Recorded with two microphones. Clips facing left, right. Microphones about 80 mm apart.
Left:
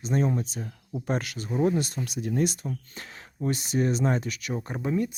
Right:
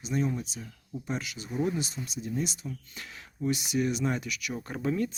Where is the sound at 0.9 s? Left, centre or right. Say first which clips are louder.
Left 5 dB; left.